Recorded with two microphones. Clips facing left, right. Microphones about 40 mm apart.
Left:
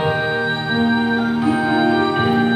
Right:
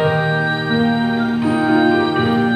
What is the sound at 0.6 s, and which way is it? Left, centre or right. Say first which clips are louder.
Music: right 1 dB; centre.